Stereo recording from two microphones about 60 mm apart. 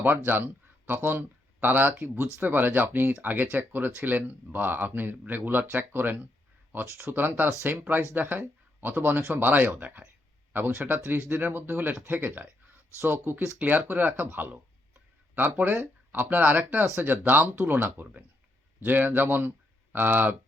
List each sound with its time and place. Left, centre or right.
0.3 s speech: right
10.7 s speech: right
13.0 s speech: right
13.6 s speech: right